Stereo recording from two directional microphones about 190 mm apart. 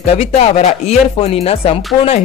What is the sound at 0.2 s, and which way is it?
Music, 35° left (ahead or behind).